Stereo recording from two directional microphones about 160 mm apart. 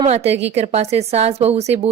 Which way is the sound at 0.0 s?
40° right (ahead or behind).